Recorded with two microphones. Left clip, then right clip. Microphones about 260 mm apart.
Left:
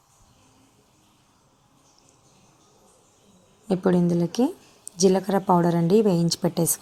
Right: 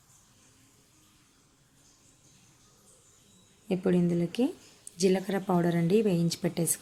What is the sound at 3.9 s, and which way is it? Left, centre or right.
Speech, centre.